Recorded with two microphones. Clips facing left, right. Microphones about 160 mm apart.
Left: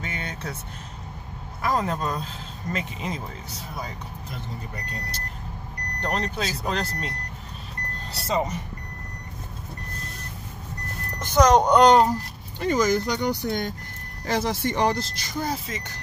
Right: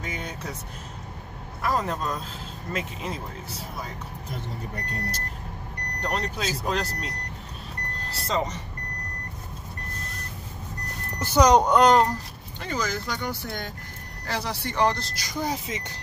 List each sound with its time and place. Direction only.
0.0 s vehicle: 10° right (ahead or behind)
1.6 s speech: centre (ahead or behind)
6.0 s speech: 5° right (ahead or behind)
8.1 s speech: 5° left (ahead or behind)
11.1 s speech: 10° right (ahead or behind)
12.5 s speech: 15° left (ahead or behind)
15.4 s speech: 15° right (ahead or behind)